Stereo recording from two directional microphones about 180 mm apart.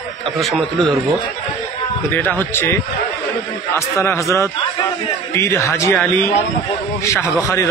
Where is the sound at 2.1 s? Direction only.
10° left (ahead or behind).